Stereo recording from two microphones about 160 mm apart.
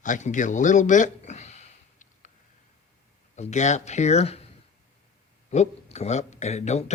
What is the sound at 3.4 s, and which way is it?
Speech, 45° left (ahead or behind).